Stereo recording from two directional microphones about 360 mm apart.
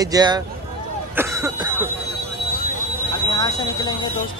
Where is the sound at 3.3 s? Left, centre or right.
Centre.